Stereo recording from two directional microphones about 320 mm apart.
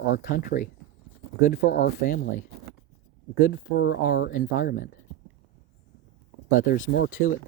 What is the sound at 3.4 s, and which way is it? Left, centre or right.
Speech, left.